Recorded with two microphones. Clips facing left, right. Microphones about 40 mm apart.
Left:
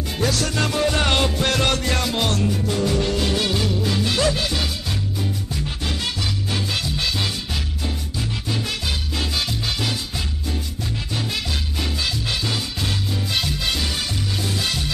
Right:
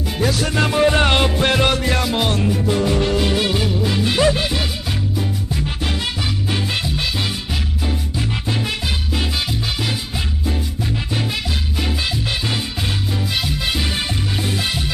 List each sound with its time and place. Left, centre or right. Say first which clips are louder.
0.2 s music: right 2 dB; centre
0.5 s music: right 5 dB; right
6.5 s music: right 3 dB; right
8.5 s music: right 2 dB; right
11.8 s music: right 3 dB; right